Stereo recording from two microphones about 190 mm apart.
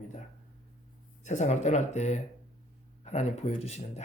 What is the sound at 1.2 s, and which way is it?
Speech, 40° left (ahead or behind).